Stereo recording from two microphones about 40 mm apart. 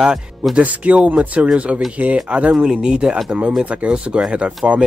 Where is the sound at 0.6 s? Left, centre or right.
Right.